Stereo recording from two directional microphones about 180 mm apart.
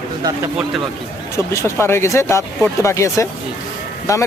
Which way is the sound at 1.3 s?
15° left (ahead or behind).